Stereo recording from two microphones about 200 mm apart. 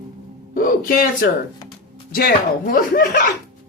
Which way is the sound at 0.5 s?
45° left (ahead or behind).